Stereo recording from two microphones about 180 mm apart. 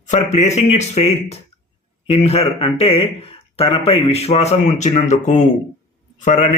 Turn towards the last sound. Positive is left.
turn(degrees=40)  # may be behind; listen again after turning